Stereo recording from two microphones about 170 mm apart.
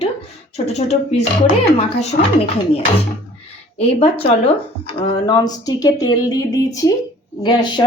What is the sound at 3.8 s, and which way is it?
A woman's voice, 35° left (ahead or behind).